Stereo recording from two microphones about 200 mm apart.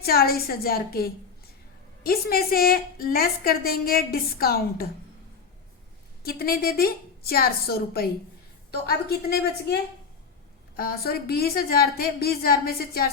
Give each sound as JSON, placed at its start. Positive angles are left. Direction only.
{"t": 0.0, "sound": "a woman's voice", "side_deg": 50}
{"t": 6.2, "sound": "a woman's voice", "side_deg": 50}
{"t": 10.8, "sound": "a woman's voice", "side_deg": 50}